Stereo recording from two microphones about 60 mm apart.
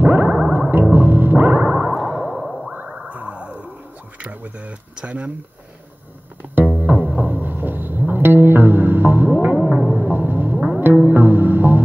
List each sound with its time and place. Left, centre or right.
0.0 s music: right
0.9 s music: right
1.9 s a sound: centre
2.9 s a sound: centre
4.4 s speech: right
6.4 s music: right